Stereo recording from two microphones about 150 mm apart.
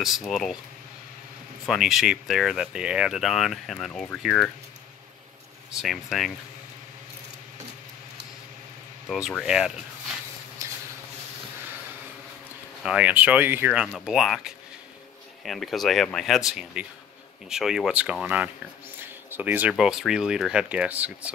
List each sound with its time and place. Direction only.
0.0 s speech: centre (ahead or behind)
1.7 s speech: centre (ahead or behind)
5.8 s speech: centre (ahead or behind)
9.1 s speech: centre (ahead or behind)
10.6 s a sound: 20° right (ahead or behind)
12.8 s speech: 10° right (ahead or behind)
13.9 s speech: centre (ahead or behind)